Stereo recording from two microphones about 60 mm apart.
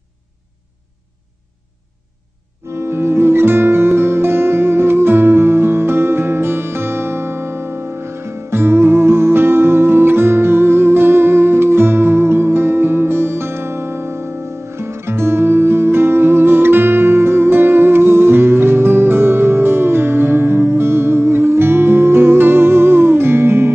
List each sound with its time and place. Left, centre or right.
2.7 s music: right